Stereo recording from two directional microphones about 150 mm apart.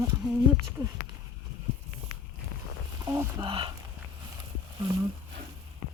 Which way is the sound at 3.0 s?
20° right (ahead or behind).